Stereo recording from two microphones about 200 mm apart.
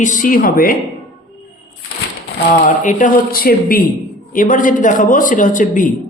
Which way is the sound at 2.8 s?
40° left (ahead or behind).